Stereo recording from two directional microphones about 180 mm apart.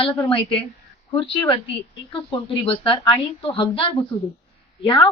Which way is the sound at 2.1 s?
25° left (ahead or behind).